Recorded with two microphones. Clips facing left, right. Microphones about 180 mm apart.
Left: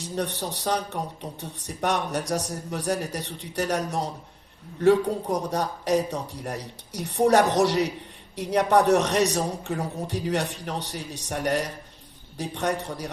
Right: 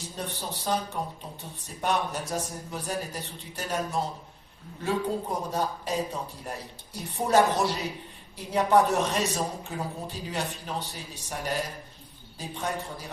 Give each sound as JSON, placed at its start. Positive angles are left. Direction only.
{"t": 0.0, "sound": "speech", "side_deg": 75}